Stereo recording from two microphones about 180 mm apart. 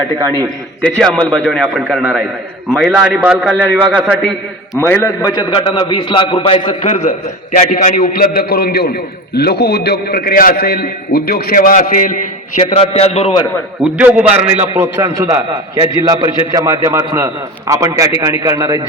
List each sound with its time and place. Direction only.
0.4 s a man's voice: 5° left (ahead or behind)
4.9 s a man's voice: 15° left (ahead or behind); by 13.4 s 30° left (ahead or behind)
13.8 s a man's voice: 10° right (ahead or behind)